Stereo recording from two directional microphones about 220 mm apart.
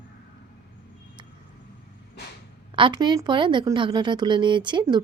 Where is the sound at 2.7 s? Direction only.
20° right (ahead or behind).